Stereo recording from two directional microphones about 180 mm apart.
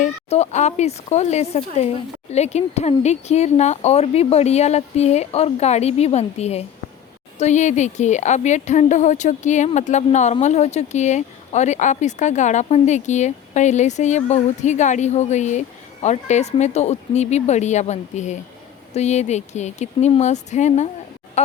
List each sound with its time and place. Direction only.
0.0 s speech: 40° left (ahead or behind)